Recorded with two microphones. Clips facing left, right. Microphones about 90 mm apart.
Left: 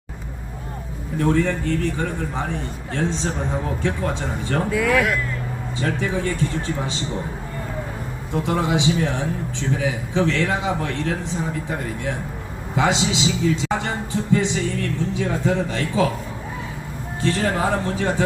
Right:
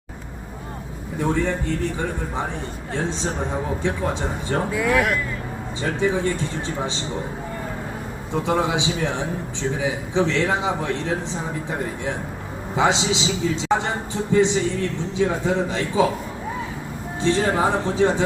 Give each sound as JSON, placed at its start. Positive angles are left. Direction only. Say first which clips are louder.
{"t": 1.2, "sound": "a man's voice", "louder": "left 2 dB", "side_deg": -10}
{"t": 3.8, "sound": "a man's voice", "louder": "even", "side_deg": -20}
{"t": 4.7, "sound": "speech", "louder": "left 1 dB", "side_deg": -5}
{"t": 6.0, "sound": "a man's voice", "louder": "right 2 dB", "side_deg": -25}
{"t": 8.3, "sound": "a man's voice", "louder": "even", "side_deg": -20}
{"t": 12.7, "sound": "a man's voice", "louder": "even", "side_deg": -25}
{"t": 17.2, "sound": "a man's voice", "louder": "right 2 dB", "side_deg": -20}